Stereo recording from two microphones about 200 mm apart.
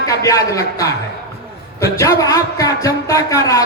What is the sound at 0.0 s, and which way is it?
Speech, 15° left (ahead or behind).